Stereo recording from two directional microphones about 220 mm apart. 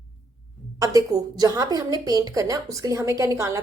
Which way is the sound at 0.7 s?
15° right (ahead or behind).